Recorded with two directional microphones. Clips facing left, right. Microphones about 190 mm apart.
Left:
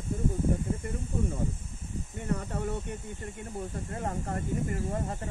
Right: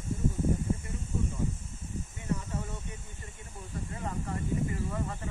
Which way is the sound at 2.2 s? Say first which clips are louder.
Left 3 dB; 60° left (ahead or behind).